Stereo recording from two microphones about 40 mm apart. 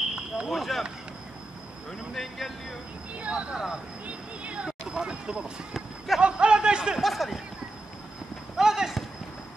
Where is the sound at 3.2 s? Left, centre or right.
Right.